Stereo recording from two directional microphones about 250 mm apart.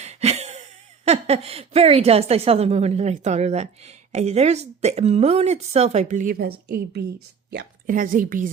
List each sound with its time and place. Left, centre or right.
0.0 s a woman's voice: right